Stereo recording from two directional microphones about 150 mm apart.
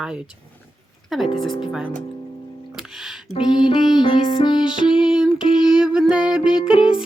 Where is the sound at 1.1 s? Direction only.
Centre (ahead or behind).